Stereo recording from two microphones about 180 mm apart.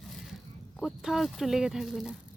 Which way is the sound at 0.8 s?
Centre (ahead or behind).